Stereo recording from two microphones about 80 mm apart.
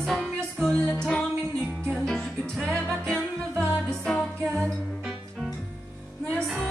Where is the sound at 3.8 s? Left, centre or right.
Centre.